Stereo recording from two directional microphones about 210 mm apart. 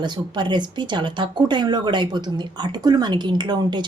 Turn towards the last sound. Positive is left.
turn(degrees=-20)  # may be behind; listen again after turning